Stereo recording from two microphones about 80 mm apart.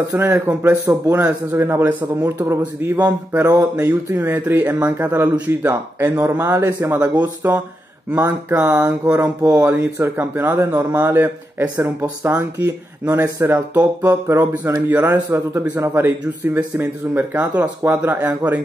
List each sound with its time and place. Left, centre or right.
0.1 s a man's voice: right
1.1 s speech: right
2.6 s speech: centre
3.8 s a man's voice: right